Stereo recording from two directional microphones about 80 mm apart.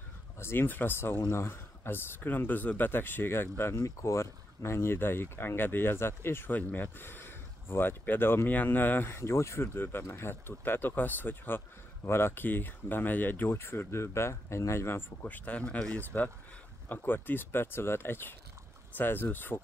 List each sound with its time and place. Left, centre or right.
0.4 s speech: left
15.2 s speech: centre
16.9 s speech: left